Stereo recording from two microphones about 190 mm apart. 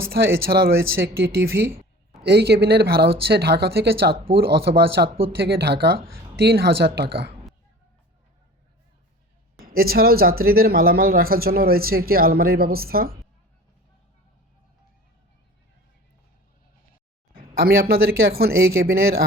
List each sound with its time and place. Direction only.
0.1 s speech: 50° right (ahead or behind)
5.0 s speech: 30° right (ahead or behind)
5.5 s speech: 55° right (ahead or behind)
9.7 s speech: 50° right (ahead or behind)
17.3 s speech: 50° right (ahead or behind)